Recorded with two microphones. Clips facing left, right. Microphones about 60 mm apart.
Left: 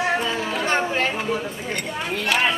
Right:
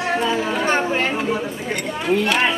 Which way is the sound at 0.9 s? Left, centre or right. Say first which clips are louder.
Right 2 dB; centre.